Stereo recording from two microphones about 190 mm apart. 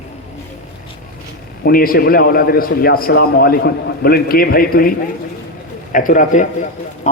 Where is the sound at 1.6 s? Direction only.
50° left (ahead or behind).